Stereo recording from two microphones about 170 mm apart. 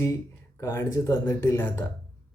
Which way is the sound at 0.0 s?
15° left (ahead or behind).